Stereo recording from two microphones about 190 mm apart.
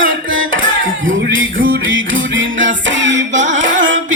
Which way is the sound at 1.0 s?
90° right.